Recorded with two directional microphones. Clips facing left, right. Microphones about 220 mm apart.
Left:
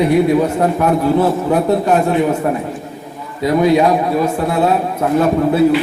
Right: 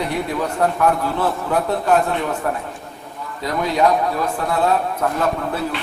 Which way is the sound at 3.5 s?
20° left (ahead or behind).